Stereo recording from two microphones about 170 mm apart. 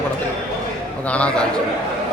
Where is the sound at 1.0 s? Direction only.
5° left (ahead or behind).